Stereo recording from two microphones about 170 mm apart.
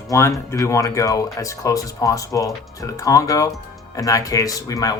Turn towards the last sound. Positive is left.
turn(degrees=20)  # may be behind; listen again after turning